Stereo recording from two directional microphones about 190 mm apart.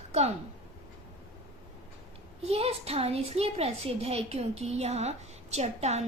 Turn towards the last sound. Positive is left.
turn(degrees=-35)  # may be behind; listen again after turning